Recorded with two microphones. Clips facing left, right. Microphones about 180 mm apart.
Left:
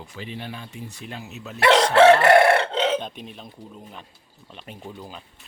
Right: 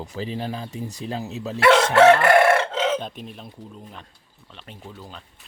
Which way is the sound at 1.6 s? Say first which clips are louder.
Even; 30° left (ahead or behind).